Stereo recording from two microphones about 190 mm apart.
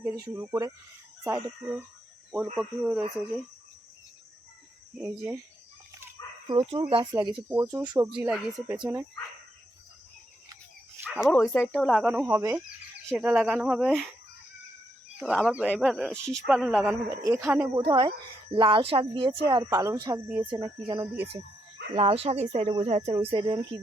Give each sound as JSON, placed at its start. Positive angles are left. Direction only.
{"t": 0.0, "sound": "speech", "side_deg": -10}
{"t": 2.6, "sound": "speech", "side_deg": -5}
{"t": 4.9, "sound": "speech", "side_deg": -10}
{"t": 5.9, "sound": "chicken", "side_deg": -10}
{"t": 6.5, "sound": "speech", "side_deg": -25}
{"t": 8.1, "sound": "speech", "side_deg": -5}
{"t": 11.0, "sound": "speech", "side_deg": -5}
{"t": 11.3, "sound": "speech", "side_deg": 10}
{"t": 15.2, "sound": "speech", "side_deg": -5}
{"t": 17.8, "sound": "speech", "side_deg": -25}
{"t": 20.5, "sound": "speech", "side_deg": -25}
{"t": 23.1, "sound": "speech", "side_deg": -20}